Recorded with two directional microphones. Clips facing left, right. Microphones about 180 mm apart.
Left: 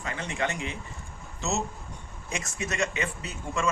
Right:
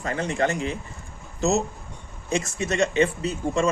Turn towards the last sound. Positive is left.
turn(degrees=-30)  # may be behind; listen again after turning